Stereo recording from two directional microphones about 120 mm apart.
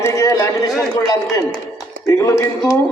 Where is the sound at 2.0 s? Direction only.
25° left (ahead or behind).